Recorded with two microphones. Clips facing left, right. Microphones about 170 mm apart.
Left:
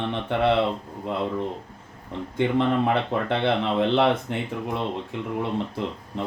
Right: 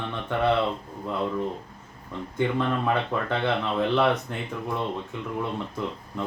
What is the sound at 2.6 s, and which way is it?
Speech, 20° left (ahead or behind).